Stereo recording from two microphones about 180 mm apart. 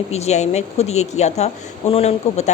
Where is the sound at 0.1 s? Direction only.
40° left (ahead or behind).